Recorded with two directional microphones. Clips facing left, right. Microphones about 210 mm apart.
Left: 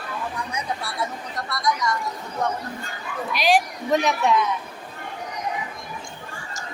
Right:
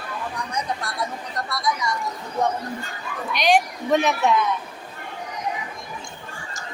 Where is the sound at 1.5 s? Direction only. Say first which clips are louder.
Left 1 dB; 5° right (ahead or behind).